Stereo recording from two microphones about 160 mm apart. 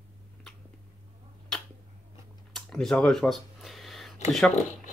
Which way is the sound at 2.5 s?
5° left (ahead or behind).